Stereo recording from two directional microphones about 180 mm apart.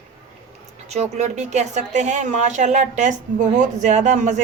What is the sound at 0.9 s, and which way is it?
A woman's voice, 40° right (ahead or behind).